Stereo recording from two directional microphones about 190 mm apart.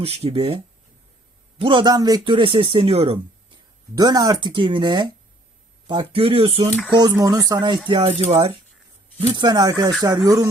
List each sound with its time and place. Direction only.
0.0 s speech: 30° right (ahead or behind)
3.9 s speech: 20° right (ahead or behind)
6.7 s speech: 5° left (ahead or behind)
6.9 s speech: 20° right (ahead or behind)
9.3 s speech: 20° right (ahead or behind)